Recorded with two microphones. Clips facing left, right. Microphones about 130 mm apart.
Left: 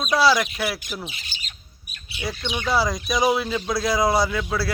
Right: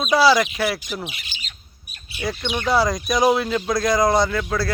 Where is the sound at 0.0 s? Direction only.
Centre (ahead or behind).